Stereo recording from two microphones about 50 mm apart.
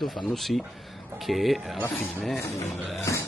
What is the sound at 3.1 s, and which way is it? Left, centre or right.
Music, left.